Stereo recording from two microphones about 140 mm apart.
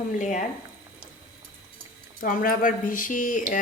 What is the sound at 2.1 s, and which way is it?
Speech, 80° left.